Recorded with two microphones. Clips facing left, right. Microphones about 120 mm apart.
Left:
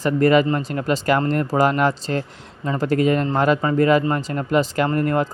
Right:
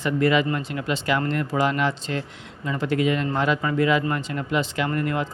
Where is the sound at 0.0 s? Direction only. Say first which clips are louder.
Left 5 dB; 45° left (ahead or behind).